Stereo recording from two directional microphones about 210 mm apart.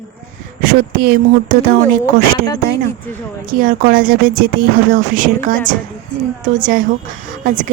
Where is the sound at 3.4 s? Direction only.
40° right (ahead or behind).